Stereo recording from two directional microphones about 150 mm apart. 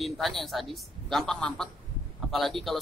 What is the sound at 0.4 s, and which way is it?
A man's voice, centre (ahead or behind).